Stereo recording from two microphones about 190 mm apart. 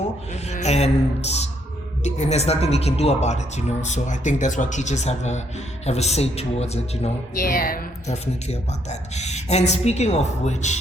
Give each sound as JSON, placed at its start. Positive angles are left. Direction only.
{"t": 0.4, "sound": "a woman's voice", "side_deg": 35}
{"t": 7.3, "sound": "a woman's voice", "side_deg": 50}